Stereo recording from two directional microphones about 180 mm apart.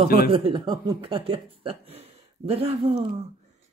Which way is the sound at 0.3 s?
30° right (ahead or behind).